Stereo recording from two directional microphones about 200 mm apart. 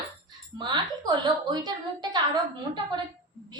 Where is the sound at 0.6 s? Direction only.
20° right (ahead or behind).